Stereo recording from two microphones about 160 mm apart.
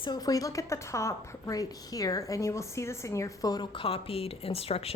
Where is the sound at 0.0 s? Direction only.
25° left (ahead or behind).